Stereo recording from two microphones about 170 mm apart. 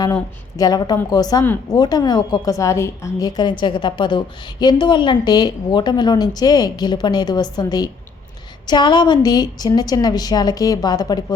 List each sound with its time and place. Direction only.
0.0 s a woman's voice: 20° left (ahead or behind)